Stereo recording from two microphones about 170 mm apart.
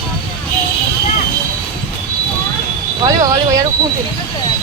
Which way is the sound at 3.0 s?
20° right (ahead or behind).